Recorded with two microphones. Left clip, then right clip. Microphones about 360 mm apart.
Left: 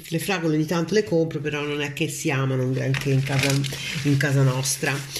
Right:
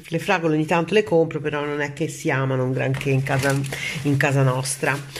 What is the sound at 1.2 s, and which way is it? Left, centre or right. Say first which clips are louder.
Speech: right 2 dB; centre.